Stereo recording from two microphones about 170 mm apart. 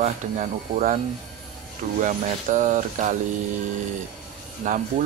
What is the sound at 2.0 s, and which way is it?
Speech, 50° right (ahead or behind).